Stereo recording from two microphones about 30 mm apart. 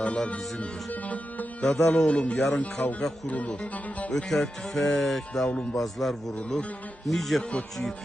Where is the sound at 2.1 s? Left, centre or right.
Left.